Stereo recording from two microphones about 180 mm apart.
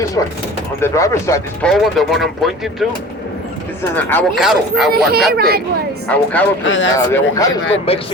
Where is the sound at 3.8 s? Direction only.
10° left (ahead or behind).